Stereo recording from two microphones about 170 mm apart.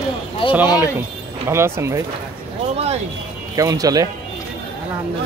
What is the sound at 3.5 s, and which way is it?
Speech, 20° right (ahead or behind).